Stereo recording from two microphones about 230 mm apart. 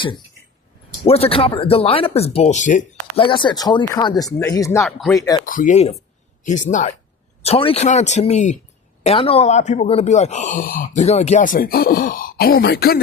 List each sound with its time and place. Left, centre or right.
1.0 s speech: left
4.3 s speech: centre
4.8 s speech: centre
5.1 s speech: centre
5.5 s speech: left